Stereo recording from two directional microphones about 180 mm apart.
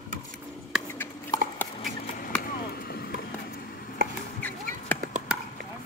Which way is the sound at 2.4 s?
55° left (ahead or behind).